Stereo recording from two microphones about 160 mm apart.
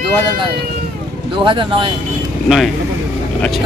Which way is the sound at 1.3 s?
30° right (ahead or behind).